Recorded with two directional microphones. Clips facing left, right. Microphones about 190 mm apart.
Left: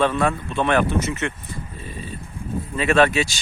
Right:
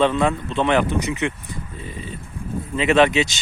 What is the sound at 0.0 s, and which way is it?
Speech, 20° right (ahead or behind).